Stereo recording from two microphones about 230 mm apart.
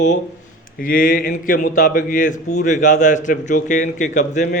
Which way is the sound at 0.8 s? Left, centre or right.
Left.